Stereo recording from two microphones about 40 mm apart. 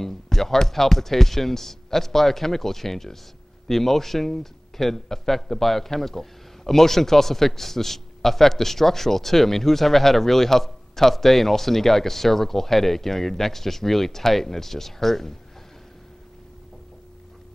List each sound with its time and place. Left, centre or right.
0.0 s a man's voice: centre